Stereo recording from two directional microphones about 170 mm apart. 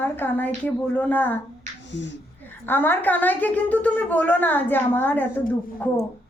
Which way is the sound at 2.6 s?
10° left (ahead or behind).